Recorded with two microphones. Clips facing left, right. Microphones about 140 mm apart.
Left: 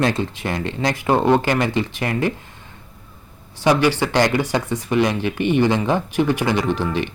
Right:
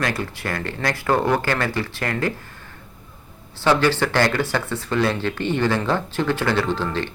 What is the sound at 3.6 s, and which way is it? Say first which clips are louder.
Speech: left 1 dB; 15° left (ahead or behind).